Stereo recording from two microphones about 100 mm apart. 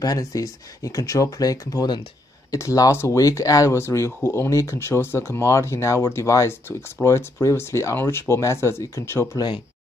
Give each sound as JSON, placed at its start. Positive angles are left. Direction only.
{"t": 0.0, "sound": "speech", "side_deg": 40}